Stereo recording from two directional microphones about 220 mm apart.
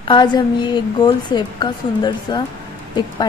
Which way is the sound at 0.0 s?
20° left (ahead or behind).